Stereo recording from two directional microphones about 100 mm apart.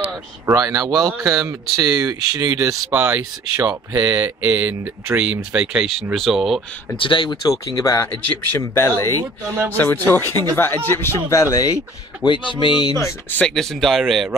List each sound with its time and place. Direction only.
0.5 s speech: 35° right (ahead or behind); by 6.6 s centre (ahead or behind)
7.0 s speech: 55° left (ahead or behind)
7.4 s speech: 35° left (ahead or behind)
12.2 s a sound: 55° left (ahead or behind)
12.9 s speech: 15° left (ahead or behind)
13.6 s speech: centre (ahead or behind)